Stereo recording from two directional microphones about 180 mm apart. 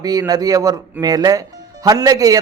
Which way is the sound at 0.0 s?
20° right (ahead or behind).